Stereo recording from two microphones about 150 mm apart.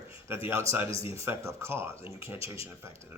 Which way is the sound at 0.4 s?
20° right (ahead or behind).